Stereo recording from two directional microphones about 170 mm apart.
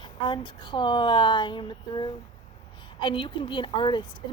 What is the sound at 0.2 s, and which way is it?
Speech, 25° left (ahead or behind).